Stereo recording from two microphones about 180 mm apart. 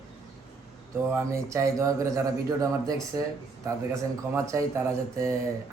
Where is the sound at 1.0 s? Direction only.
15° right (ahead or behind).